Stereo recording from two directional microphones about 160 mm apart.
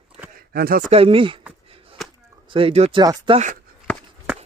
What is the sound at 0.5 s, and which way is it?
Speech, 70° right (ahead or behind).